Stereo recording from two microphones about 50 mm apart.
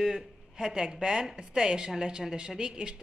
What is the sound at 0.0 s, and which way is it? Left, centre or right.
A man's voice, centre.